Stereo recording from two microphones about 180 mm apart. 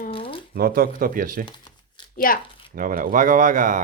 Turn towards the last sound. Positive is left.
turn(degrees=-45)  # may be behind; listen again after turning